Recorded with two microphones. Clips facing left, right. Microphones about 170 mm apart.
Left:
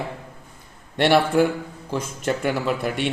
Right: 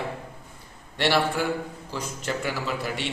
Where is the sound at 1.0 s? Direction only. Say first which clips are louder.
Left 7 dB; 50° left (ahead or behind).